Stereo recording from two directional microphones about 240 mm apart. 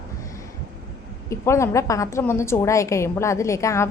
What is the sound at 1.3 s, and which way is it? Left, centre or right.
A woman's voice, centre.